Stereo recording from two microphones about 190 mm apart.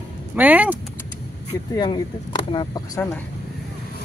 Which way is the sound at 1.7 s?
25° left (ahead or behind).